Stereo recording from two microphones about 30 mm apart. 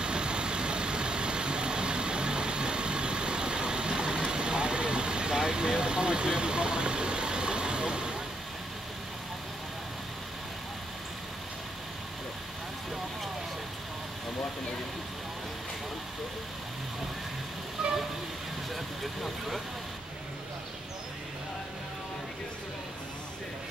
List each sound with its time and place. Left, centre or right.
0.0 s vehicle: right
17.8 s vehicle: right